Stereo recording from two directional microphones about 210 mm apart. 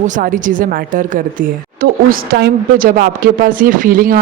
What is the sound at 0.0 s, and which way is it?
A woman's voice, 40° right (ahead or behind).